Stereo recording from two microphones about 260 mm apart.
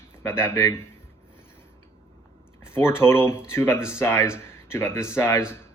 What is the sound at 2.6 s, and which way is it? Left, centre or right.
Speech, centre.